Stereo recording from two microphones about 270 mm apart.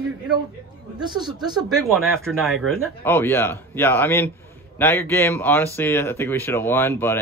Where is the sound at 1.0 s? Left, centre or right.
Centre.